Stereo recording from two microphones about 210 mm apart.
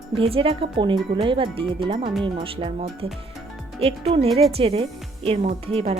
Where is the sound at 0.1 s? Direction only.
25° right (ahead or behind).